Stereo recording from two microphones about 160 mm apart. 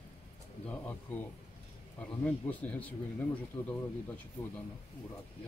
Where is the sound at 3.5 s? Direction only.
35° left (ahead or behind).